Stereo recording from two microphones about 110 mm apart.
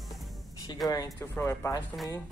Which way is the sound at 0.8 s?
35° left (ahead or behind).